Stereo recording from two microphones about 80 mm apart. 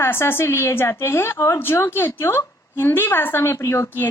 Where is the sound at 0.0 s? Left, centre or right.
Left.